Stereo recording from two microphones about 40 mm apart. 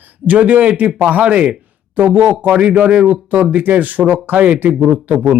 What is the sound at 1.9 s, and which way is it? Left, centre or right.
Speech, right.